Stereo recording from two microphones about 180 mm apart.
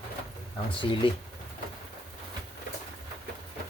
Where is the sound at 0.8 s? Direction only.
30° left (ahead or behind).